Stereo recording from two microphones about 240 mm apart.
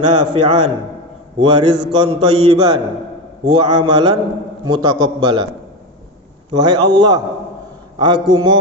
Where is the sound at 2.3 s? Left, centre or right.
Right.